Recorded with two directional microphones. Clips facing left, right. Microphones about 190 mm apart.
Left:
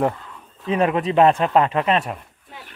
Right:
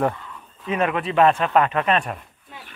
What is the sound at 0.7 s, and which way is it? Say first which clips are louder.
Speech: left 3 dB; 30° left (ahead or behind).